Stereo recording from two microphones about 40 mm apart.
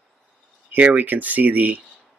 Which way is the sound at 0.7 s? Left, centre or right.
Right.